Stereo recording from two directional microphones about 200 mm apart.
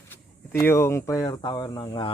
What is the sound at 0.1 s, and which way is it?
Speech, 10° left (ahead or behind).